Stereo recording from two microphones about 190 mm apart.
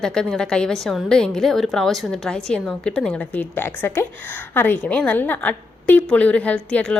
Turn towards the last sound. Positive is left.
turn(degrees=5)  # may be behind; listen again after turning